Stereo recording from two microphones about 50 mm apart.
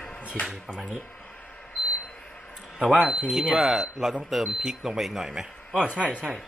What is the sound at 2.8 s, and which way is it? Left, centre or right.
Speech, centre.